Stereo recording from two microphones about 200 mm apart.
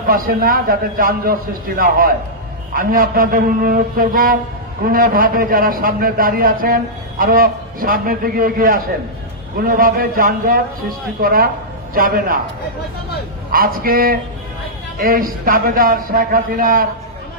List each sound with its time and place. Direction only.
0.0 s a man's voice: 45° right (ahead or behind)
13.5 s a man's voice: 45° right (ahead or behind)